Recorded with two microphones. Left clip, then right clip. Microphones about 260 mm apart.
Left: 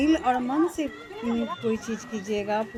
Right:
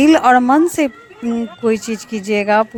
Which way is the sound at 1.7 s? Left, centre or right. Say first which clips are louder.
Right 10 dB; right.